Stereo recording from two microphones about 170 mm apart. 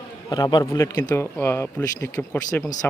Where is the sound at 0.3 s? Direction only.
25° left (ahead or behind).